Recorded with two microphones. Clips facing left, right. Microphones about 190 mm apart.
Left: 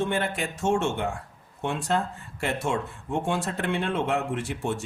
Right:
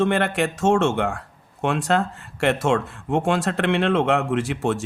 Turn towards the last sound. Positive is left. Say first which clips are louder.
# right 7 dB
turn(degrees=-90)